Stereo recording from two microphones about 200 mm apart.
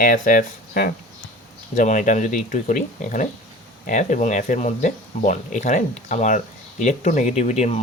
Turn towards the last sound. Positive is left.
turn(degrees=35)  # may be behind; listen again after turning